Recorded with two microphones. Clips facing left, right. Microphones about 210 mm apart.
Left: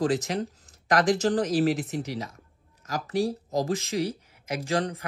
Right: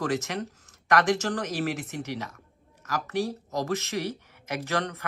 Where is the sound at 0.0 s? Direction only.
30° left (ahead or behind).